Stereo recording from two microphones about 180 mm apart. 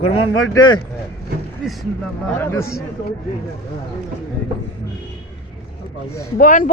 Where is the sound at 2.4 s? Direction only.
15° left (ahead or behind).